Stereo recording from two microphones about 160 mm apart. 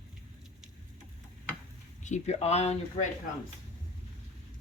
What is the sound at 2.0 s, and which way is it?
Speech, 50° left (ahead or behind).